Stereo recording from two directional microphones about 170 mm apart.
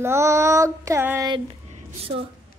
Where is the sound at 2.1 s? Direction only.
30° right (ahead or behind).